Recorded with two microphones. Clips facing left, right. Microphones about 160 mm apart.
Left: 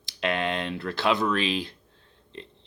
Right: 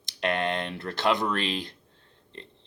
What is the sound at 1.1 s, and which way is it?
Speech, 15° right (ahead or behind).